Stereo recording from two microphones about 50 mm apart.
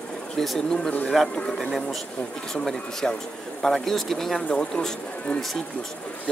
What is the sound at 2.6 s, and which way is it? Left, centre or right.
Speech, centre.